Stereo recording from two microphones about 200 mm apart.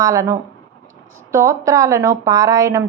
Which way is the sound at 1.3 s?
15° right (ahead or behind).